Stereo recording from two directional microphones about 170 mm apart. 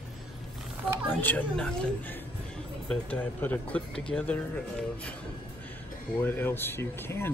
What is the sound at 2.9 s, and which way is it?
Speech, 10° left (ahead or behind).